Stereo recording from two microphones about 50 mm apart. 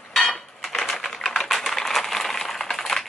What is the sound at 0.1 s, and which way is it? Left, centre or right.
Typewriter, centre.